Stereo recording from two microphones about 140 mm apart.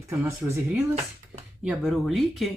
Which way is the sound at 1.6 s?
5° right (ahead or behind).